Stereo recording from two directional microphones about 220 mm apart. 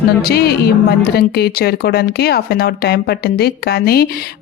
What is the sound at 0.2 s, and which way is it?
Speech, 45° left (ahead or behind).